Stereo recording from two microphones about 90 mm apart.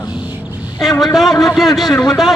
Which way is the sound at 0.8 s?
5° left (ahead or behind).